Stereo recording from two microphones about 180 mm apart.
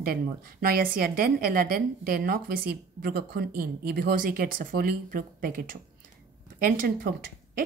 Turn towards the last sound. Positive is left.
turn(degrees=-50)  # may be behind; listen again after turning